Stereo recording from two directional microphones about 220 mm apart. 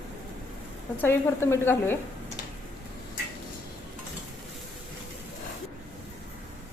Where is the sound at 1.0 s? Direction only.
10° left (ahead or behind).